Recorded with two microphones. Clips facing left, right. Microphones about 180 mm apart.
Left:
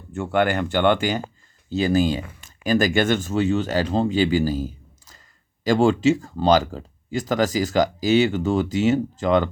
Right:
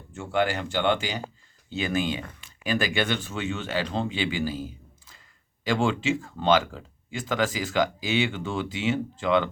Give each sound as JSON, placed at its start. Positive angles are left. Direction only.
{"t": 0.1, "sound": "speech", "side_deg": 60}
{"t": 1.7, "sound": "speech", "side_deg": 40}